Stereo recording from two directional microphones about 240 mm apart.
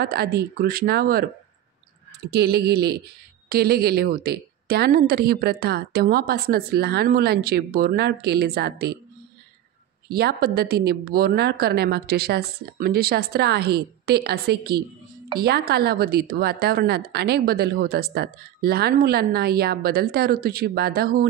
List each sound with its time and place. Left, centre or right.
0.0 s a woman's voice: right
2.3 s a woman's voice: right
10.0 s a woman's voice: right